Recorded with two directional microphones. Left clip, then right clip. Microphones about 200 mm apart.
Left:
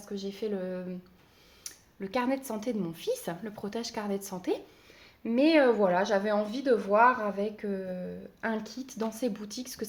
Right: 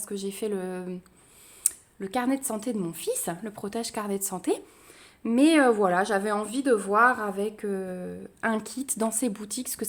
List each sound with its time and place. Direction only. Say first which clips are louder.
0.0 s speech: right 4 dB; 40° right (ahead or behind)
1.7 s a sound: right 12 dB; 40° right (ahead or behind)
2.0 s a woman's voice: right 2 dB; 30° right (ahead or behind)